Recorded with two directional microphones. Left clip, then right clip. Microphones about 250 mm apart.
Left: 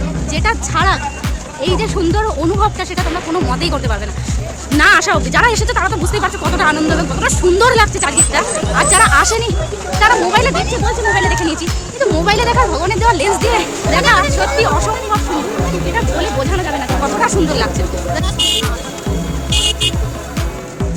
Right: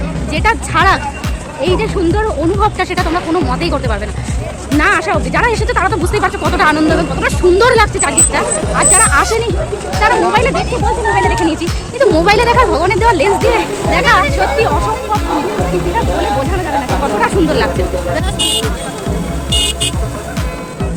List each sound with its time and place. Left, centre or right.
0.3 s speech: centre
4.8 s speech: centre
11.6 s speech: centre
17.0 s speech: centre